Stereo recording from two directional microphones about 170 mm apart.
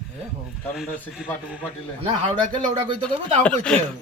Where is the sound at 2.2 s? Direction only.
30° right (ahead or behind).